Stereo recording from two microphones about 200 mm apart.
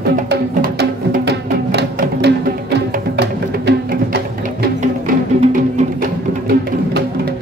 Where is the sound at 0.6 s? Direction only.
50° right (ahead or behind).